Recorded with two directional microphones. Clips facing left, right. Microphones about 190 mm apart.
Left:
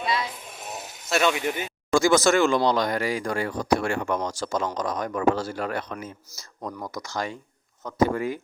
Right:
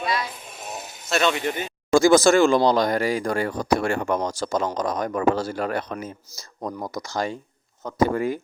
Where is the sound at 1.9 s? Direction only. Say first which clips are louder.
Right 4 dB; 35° right (ahead or behind).